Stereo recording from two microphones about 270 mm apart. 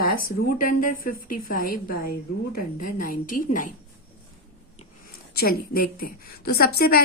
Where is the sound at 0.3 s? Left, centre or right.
Left.